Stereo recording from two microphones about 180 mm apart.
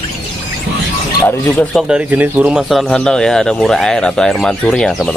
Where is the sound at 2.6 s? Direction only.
Centre (ahead or behind).